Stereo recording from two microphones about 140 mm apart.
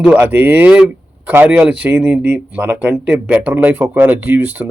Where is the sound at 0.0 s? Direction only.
10° right (ahead or behind).